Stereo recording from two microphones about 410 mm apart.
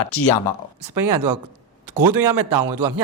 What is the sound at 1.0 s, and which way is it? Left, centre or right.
Speech, right.